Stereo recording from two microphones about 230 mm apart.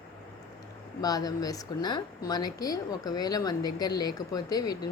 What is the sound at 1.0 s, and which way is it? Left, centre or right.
Speech, centre.